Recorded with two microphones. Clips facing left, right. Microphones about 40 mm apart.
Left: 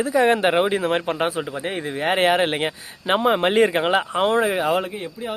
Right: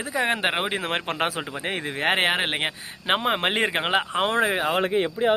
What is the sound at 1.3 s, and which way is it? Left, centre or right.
Speech, right.